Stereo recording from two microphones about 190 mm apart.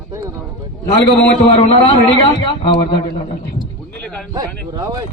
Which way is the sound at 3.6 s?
5° left (ahead or behind).